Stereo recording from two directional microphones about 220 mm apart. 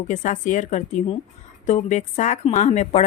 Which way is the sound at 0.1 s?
35° left (ahead or behind).